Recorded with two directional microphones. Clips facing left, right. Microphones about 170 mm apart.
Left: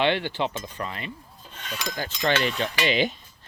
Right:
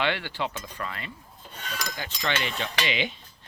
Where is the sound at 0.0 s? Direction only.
20° left (ahead or behind).